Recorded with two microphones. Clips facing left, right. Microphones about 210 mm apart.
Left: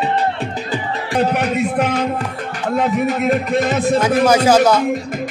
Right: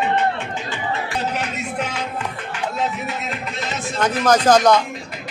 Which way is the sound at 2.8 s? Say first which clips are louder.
Left 11 dB; 55° left (ahead or behind).